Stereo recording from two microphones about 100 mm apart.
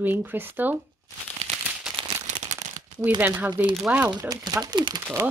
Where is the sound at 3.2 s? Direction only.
15° right (ahead or behind).